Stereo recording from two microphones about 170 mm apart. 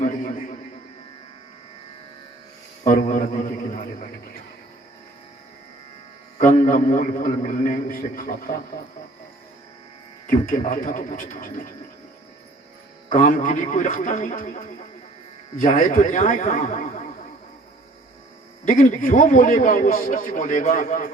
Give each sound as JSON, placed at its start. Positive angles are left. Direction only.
{"t": 0.0, "sound": "music", "side_deg": 50}
{"t": 2.8, "sound": "speech", "side_deg": 50}
{"t": 6.7, "sound": "speech", "side_deg": 50}
{"t": 10.2, "sound": "speech", "side_deg": 50}
{"t": 13.1, "sound": "speech", "side_deg": 50}
{"t": 18.7, "sound": "speech", "side_deg": 50}